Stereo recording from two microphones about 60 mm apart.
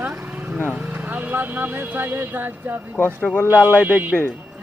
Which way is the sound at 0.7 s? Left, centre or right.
Right.